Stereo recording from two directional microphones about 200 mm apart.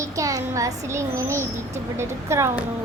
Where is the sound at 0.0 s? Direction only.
15° right (ahead or behind).